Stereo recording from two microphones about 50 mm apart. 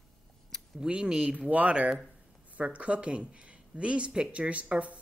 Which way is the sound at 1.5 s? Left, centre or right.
Right.